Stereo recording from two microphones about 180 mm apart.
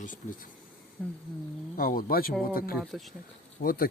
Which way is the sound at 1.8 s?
50° left (ahead or behind).